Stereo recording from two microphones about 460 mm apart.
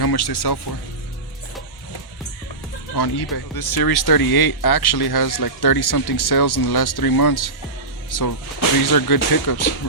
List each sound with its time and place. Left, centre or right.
0.0 s speech: left
2.9 s speech: left